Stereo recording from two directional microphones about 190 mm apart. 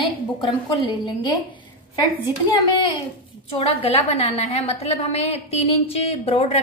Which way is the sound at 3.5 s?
30° left (ahead or behind).